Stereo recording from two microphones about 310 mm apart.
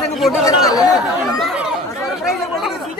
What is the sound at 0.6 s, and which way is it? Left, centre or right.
Speech, centre.